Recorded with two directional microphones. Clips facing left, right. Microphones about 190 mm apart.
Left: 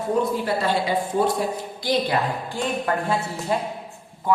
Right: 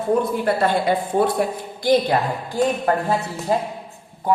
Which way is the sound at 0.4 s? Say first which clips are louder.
Right 4 dB; 55° right (ahead or behind).